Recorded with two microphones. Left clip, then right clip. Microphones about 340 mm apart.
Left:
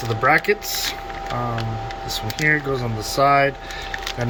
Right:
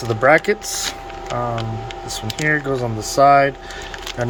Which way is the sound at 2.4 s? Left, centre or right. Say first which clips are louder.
Right 1 dB; centre.